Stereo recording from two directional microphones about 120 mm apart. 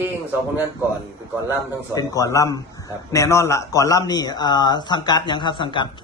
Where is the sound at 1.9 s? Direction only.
30° left (ahead or behind).